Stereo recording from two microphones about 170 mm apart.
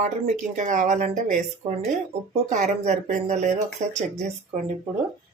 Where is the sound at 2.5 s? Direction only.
45° right (ahead or behind).